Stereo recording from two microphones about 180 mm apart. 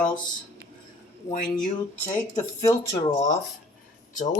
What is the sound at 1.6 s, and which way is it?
Speech, 10° left (ahead or behind).